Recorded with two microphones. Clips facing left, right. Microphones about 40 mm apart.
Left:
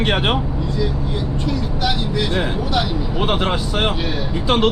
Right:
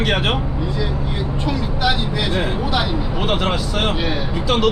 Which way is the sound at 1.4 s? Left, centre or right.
Centre.